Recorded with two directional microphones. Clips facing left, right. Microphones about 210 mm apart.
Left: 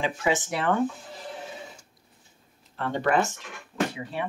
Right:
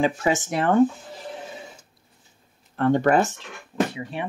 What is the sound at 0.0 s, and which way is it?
Speech, 45° right (ahead or behind).